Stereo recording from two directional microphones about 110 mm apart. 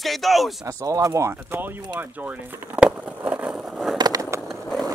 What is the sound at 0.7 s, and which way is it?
Speech, 30° right (ahead or behind).